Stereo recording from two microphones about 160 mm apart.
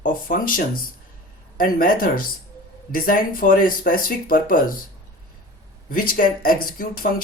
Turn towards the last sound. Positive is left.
turn(degrees=60)  # may be behind; listen again after turning